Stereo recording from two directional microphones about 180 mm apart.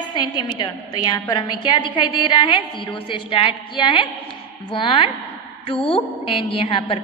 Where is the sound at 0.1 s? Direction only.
25° left (ahead or behind).